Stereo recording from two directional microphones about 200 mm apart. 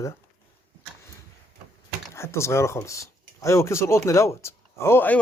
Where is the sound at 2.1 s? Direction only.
15° left (ahead or behind).